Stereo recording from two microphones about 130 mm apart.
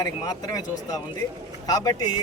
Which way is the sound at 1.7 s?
30° left (ahead or behind).